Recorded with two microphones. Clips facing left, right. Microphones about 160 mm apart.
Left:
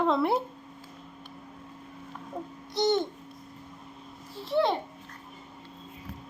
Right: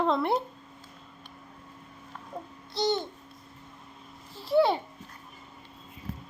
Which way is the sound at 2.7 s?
20° left (ahead or behind).